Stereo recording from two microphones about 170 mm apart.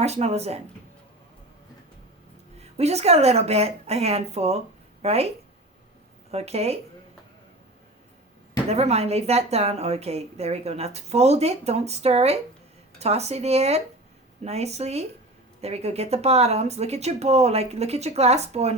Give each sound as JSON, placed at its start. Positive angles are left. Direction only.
{"t": 0.0, "sound": "speech", "side_deg": -40}
{"t": 2.7, "sound": "speech", "side_deg": -40}
{"t": 6.3, "sound": "speech", "side_deg": -40}
{"t": 8.7, "sound": "speech", "side_deg": -40}